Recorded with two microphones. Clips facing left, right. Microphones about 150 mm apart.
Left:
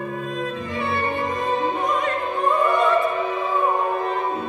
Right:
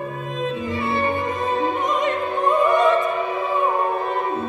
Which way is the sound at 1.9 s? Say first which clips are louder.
Right 2 dB; 20° right (ahead or behind).